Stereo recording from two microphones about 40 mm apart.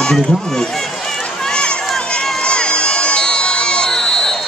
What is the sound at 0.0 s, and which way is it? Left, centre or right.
Run, centre.